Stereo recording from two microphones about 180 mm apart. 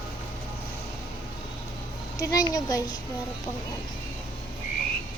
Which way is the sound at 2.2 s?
20° left (ahead or behind).